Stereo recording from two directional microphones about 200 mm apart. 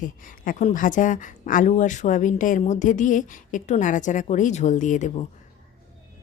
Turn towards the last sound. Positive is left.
turn(degrees=40)  # may be behind; listen again after turning